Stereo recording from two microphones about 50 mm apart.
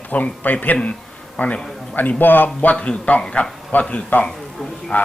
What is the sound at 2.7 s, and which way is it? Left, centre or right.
Speech, left.